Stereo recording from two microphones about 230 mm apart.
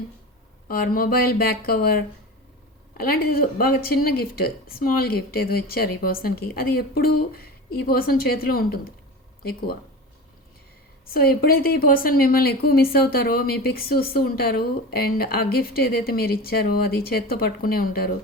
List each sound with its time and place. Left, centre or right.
0.7 s speech: left
11.1 s speech: left